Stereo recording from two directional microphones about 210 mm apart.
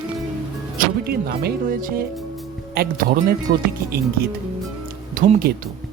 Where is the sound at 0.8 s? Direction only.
45° right (ahead or behind).